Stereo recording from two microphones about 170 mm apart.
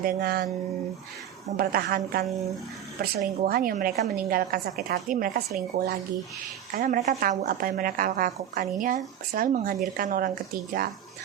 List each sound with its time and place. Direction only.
0.0 s a woman's voice: 65° right (ahead or behind)
1.5 s a woman's voice: 60° right (ahead or behind)